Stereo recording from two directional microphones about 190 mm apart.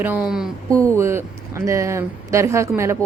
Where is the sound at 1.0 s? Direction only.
15° right (ahead or behind).